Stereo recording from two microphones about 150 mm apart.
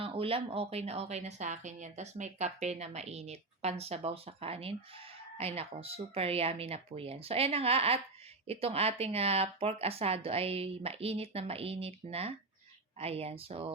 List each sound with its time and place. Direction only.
0.0 s speech: 40° right (ahead or behind)